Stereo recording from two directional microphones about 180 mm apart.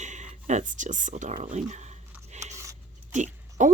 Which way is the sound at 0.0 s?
40° right (ahead or behind).